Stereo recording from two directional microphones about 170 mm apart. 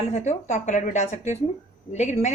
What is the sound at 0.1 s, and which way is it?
Speech, 40° left (ahead or behind).